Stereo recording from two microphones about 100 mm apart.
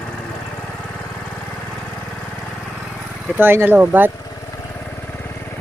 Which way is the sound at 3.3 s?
20° right (ahead or behind).